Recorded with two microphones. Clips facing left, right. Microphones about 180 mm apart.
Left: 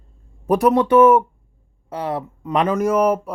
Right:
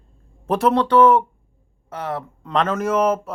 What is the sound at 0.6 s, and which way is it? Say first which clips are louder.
Speech: left 2 dB; 20° left (ahead or behind).